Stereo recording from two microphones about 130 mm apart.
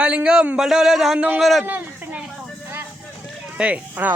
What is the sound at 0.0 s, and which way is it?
A man's voice, 10° right (ahead or behind).